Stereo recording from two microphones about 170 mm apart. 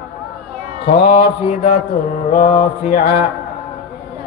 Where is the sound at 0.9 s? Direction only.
75° left (ahead or behind).